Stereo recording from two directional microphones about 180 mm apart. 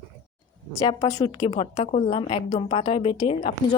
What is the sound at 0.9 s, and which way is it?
A woman's voice, 25° left (ahead or behind).